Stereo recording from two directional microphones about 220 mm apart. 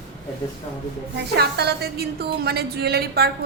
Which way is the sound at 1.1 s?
50° right (ahead or behind).